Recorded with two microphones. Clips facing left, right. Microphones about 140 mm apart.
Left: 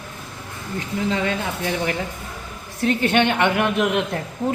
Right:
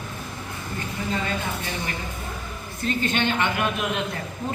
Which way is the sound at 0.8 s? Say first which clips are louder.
Left 6 dB; 90° left.